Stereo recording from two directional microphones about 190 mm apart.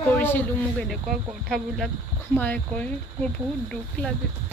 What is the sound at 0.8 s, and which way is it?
Speech, centre (ahead or behind).